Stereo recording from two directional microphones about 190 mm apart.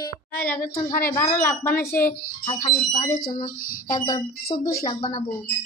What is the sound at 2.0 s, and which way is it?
Speech, 50° left (ahead or behind).